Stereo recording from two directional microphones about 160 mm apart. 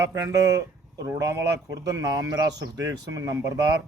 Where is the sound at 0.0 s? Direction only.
20° right (ahead or behind).